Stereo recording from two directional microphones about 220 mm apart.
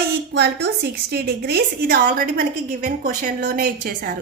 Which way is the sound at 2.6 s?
35° right (ahead or behind).